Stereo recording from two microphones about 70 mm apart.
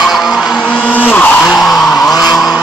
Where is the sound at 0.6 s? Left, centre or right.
Centre.